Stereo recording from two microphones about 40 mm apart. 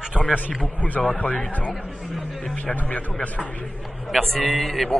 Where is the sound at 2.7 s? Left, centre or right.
Left.